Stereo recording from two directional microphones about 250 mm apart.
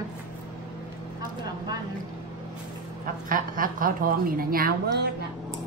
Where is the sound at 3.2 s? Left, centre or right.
Right.